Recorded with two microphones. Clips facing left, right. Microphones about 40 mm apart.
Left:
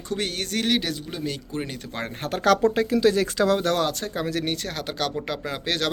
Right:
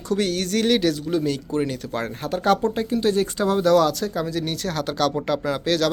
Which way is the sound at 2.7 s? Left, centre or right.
Left.